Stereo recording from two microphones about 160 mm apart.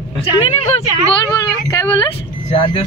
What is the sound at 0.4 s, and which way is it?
Speech, 40° left (ahead or behind).